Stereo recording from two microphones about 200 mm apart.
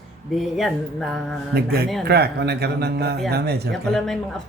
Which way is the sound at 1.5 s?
50° right (ahead or behind).